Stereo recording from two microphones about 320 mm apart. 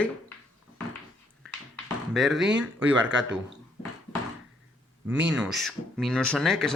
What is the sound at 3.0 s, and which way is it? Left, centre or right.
Speech, right.